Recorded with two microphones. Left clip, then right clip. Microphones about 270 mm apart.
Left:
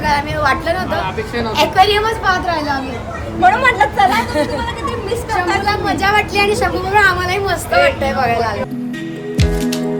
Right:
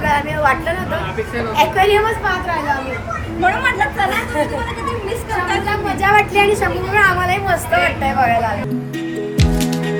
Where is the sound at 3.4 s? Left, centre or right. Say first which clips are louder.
Left 5 dB; left.